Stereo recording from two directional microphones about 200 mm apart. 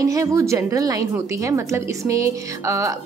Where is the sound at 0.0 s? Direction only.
15° right (ahead or behind).